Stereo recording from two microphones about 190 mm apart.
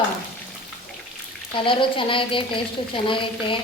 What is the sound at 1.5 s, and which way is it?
A woman's voice, 25° left (ahead or behind).